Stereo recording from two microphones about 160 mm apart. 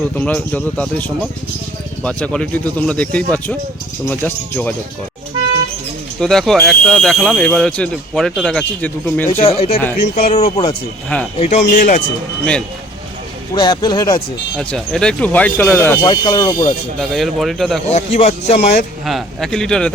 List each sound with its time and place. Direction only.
0.2 s speech: 10° left (ahead or behind)
6.1 s speech: centre (ahead or behind)
9.4 s speech: 40° left (ahead or behind)
10.0 s speech: 75° left (ahead or behind)
10.3 s a man's voice: 35° left (ahead or behind)
11.7 s speech: 55° left (ahead or behind)
13.5 s speech: 25° left (ahead or behind)
14.6 s speech: 5° left (ahead or behind)
16.0 s speech: 25° left (ahead or behind)
17.0 s speech: centre (ahead or behind)
17.8 s a man's voice: 45° left (ahead or behind)
19.0 s speech: centre (ahead or behind)